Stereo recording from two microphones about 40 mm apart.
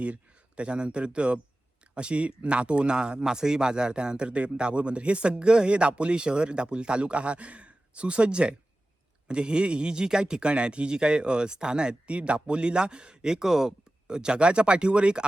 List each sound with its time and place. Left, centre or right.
0.0 s speech: right